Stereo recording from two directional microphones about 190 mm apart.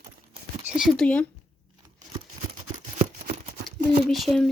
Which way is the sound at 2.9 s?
35° right (ahead or behind).